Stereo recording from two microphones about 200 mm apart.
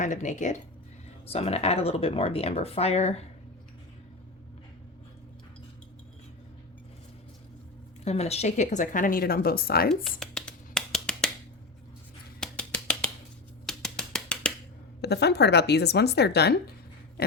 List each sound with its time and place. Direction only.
0.0 s a woman's voice: 40° left (ahead or behind)
8.0 s a woman's voice: 30° left (ahead or behind); by 9.9 s 50° left (ahead or behind)
9.9 s scratch: centre (ahead or behind)
12.4 s a sound: 5° left (ahead or behind)
15.0 s a woman's voice: 55° left (ahead or behind)
17.2 s a sound: 55° left (ahead or behind)